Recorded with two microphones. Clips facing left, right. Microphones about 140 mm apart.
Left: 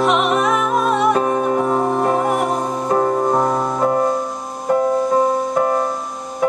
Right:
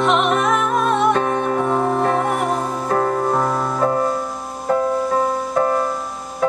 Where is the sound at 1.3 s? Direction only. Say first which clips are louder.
Left 2 dB; 25° left (ahead or behind).